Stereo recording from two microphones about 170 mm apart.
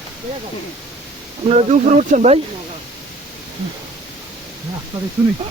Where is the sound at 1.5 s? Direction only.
40° right (ahead or behind).